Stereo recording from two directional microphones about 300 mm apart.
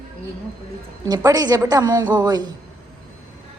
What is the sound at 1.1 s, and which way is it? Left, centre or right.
A woman's voice, centre.